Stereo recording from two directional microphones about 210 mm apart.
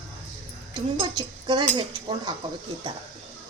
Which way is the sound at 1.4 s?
20° right (ahead or behind).